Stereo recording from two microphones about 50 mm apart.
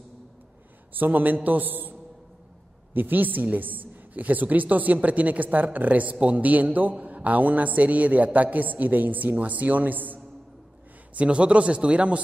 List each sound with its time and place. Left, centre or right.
0.9 s a man's voice: right
11.1 s speech: right